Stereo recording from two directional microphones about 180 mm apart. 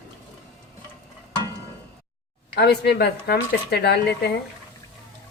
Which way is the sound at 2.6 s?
65° left (ahead or behind).